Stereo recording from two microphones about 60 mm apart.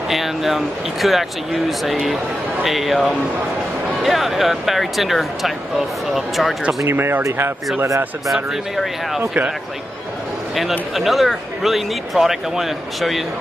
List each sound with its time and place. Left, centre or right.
0.1 s speech: centre
4.0 s speech: centre
6.9 s speech: right
8.3 s speech: centre
11.0 s speech: centre